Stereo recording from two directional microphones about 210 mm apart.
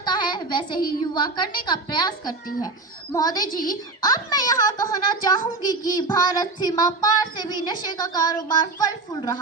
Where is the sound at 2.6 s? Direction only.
15° left (ahead or behind).